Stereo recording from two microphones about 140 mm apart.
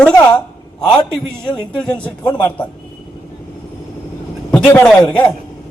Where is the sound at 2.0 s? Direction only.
10° left (ahead or behind).